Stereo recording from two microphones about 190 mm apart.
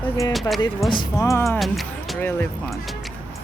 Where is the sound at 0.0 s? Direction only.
15° left (ahead or behind).